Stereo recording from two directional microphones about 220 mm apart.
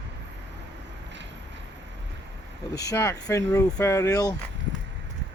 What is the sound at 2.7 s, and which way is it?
Speech, 15° left (ahead or behind).